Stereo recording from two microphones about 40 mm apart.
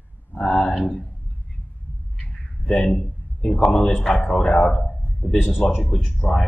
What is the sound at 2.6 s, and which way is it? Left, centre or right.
A man's voice, left.